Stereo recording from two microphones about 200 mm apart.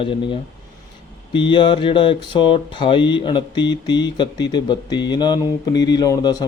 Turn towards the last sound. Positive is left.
turn(degrees=20)  # may be behind; listen again after turning